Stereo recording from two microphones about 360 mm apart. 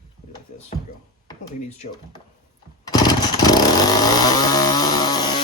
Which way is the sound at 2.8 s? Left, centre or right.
Centre.